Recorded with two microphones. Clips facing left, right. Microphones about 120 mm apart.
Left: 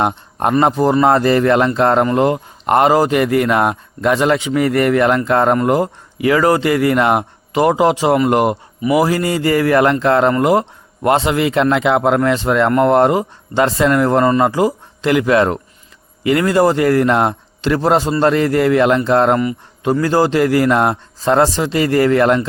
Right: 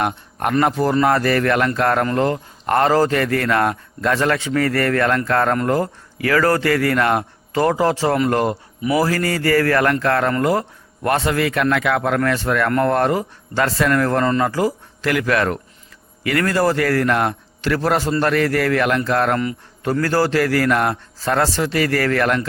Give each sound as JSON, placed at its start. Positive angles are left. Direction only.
{"t": 0.0, "sound": "a man's voice", "side_deg": 25}